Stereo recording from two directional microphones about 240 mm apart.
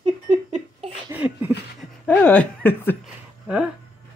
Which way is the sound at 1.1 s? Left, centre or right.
Centre.